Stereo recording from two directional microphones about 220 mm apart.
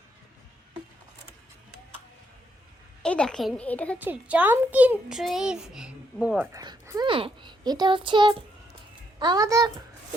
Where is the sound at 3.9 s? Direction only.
5° right (ahead or behind).